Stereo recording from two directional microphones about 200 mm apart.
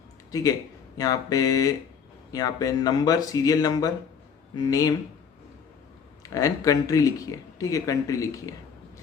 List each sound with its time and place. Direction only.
0.3 s a man's voice: 15° left (ahead or behind)
6.3 s speech: 15° left (ahead or behind)